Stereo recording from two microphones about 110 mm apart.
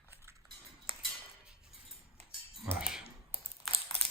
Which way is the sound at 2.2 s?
90° right.